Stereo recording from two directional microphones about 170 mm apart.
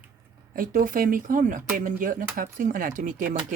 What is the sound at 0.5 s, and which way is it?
Speech, 55° right (ahead or behind).